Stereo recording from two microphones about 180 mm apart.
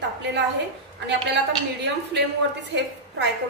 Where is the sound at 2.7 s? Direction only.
70° right (ahead or behind).